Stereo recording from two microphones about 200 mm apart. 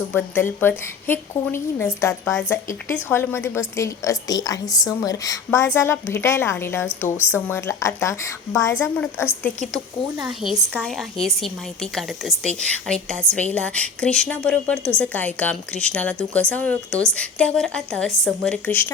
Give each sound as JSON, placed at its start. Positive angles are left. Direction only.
{"t": 0.1, "sound": "a woman's voice", "side_deg": 10}
{"t": 10.2, "sound": "a woman's voice", "side_deg": -5}